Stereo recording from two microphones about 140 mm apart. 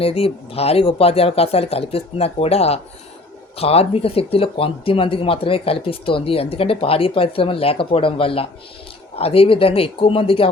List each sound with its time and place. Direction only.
0.0 s speech: 45° left (ahead or behind)